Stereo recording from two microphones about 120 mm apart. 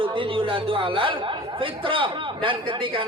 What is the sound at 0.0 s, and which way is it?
A man's voice, 45° right (ahead or behind).